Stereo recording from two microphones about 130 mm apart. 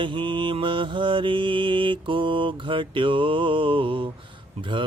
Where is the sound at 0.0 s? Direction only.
40° right (ahead or behind).